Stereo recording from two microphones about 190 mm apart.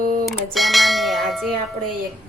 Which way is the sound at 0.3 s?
Centre (ahead or behind).